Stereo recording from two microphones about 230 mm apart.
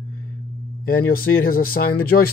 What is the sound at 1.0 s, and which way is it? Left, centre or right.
Speech, left.